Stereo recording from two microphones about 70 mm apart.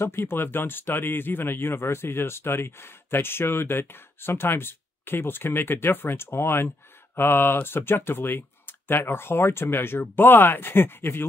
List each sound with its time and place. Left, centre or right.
0.0 s speech: left